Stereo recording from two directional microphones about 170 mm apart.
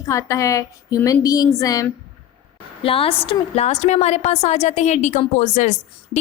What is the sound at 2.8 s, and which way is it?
A woman's voice, 35° left (ahead or behind).